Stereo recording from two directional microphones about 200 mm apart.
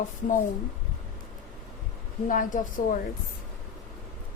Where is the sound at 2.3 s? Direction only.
40° left (ahead or behind).